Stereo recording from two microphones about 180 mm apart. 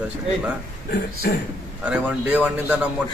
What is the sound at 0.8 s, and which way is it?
Speech, 65° left (ahead or behind).